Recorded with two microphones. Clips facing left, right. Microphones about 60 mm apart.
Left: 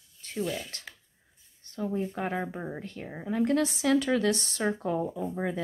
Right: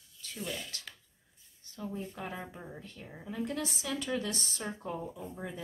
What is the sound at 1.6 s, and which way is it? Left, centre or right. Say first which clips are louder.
Speech: left 9 dB; left.